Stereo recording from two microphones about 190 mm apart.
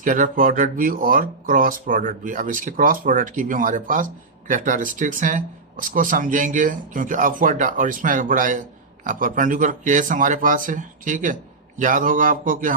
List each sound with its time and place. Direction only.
0.0 s speech: 45° right (ahead or behind)